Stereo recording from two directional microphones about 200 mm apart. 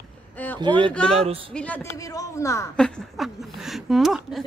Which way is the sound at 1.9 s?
15° left (ahead or behind).